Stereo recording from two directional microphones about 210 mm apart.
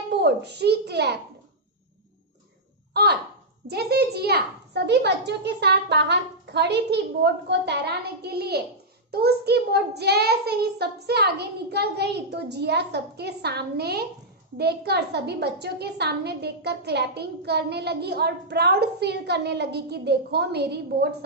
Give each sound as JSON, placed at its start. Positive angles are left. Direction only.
{"t": 0.1, "sound": "a woman's voice", "side_deg": -55}
{"t": 2.9, "sound": "a woman's voice", "side_deg": -50}